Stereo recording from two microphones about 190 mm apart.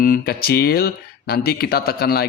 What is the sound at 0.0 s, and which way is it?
Speech, 50° left (ahead or behind).